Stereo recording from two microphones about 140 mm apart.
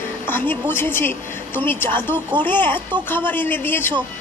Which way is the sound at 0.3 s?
15° left (ahead or behind).